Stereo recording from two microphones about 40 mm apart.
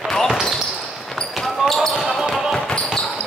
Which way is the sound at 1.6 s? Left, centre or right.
Centre.